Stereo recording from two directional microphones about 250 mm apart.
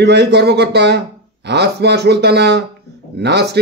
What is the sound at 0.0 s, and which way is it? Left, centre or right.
A man's voice, right.